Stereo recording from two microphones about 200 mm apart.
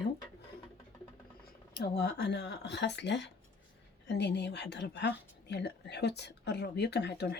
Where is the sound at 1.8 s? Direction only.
55° left (ahead or behind).